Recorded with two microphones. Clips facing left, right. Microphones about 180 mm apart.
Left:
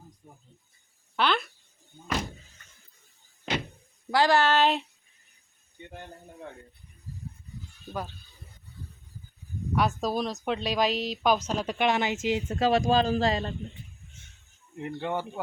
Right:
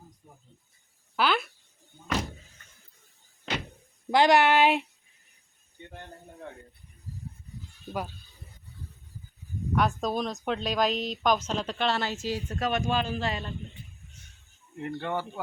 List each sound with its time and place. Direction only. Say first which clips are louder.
1.1 s speech: even; 5° right (ahead or behind)
4.1 s speech: right 2 dB; 20° right (ahead or behind)
9.7 s speech: even; 5° left (ahead or behind); by 13.5 s 35° left (ahead or behind)
14.8 s speech: even; 15° left (ahead or behind)